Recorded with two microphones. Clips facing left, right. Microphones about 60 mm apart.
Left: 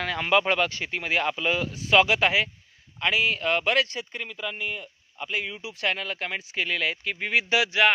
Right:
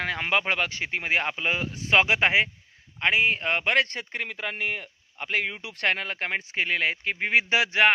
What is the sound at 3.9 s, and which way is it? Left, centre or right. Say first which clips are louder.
A man's voice: right 2 dB; right.